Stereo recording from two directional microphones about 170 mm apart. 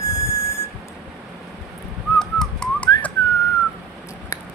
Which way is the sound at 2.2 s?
Centre (ahead or behind).